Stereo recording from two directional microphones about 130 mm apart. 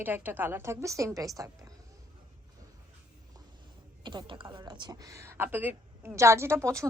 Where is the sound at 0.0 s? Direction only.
15° right (ahead or behind).